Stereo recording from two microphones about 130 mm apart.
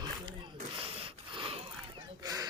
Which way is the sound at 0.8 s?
45° right (ahead or behind).